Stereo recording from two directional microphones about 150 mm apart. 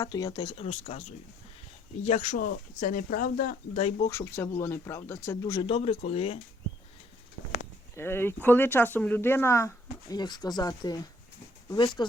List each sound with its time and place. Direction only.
0.0 s speech: 25° left (ahead or behind); by 1.0 s 45° left (ahead or behind)
2.0 s speech: 55° left (ahead or behind)
4.1 s speech: 15° left (ahead or behind)
5.6 s speech: 40° left (ahead or behind)
7.9 s speech: 15° left (ahead or behind)